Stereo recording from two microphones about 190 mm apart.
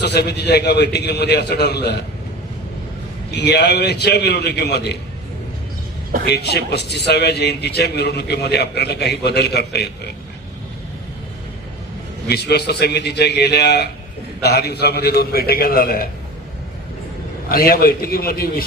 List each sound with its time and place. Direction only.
0.0 s a man's voice: 60° left (ahead or behind)
3.3 s a man's voice: 60° left (ahead or behind)
6.2 s a man's voice: 60° left (ahead or behind)
12.3 s a man's voice: 60° left (ahead or behind)
17.5 s a man's voice: 50° left (ahead or behind)